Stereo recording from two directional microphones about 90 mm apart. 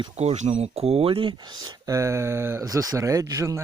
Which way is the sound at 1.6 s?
35° right (ahead or behind).